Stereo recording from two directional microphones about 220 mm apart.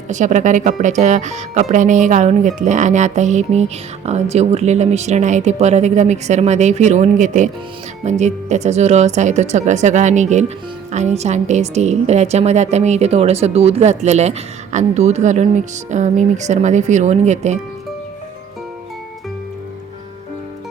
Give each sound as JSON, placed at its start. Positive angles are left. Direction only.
{"t": 0.1, "sound": "a woman's voice", "side_deg": -35}